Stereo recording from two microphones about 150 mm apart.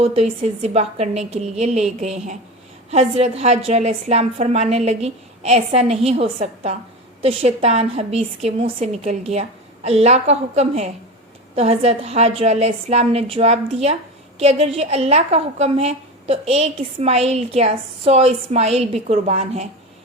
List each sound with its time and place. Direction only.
0.0 s a woman's voice: 45° right (ahead or behind)